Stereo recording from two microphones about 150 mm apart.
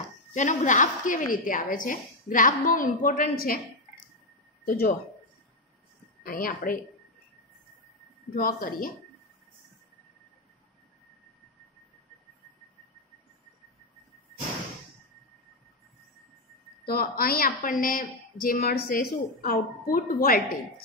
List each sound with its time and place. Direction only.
0.3 s a woman's voice: 55° left (ahead or behind); by 3.5 s 75° left (ahead or behind)
4.6 s a woman's voice: 70° left (ahead or behind)
6.2 s a woman's voice: 70° left (ahead or behind)
8.4 s a woman's voice: 70° left (ahead or behind)
16.8 s a woman's voice: 80° left
19.4 s a woman's voice: 75° left (ahead or behind)